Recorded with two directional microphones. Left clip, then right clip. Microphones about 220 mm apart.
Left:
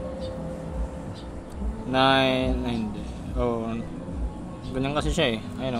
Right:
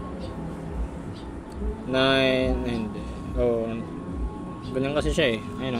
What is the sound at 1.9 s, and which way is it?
Speech, 10° left (ahead or behind).